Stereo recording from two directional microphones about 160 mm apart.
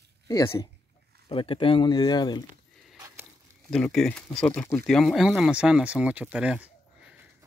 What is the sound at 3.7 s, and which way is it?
Speech, 5° left (ahead or behind).